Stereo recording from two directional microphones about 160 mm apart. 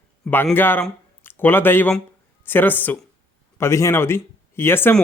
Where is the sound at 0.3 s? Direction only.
10° left (ahead or behind).